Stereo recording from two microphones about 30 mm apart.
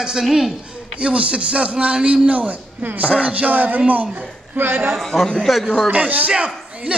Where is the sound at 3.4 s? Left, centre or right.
Right.